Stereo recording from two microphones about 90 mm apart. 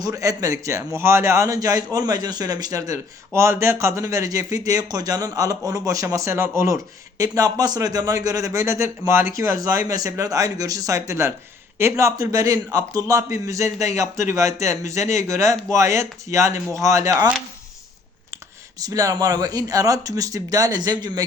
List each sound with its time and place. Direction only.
0.0 s a man's voice: 40° right (ahead or behind)
7.2 s a man's voice: 45° right (ahead or behind)
18.8 s speech: 45° right (ahead or behind)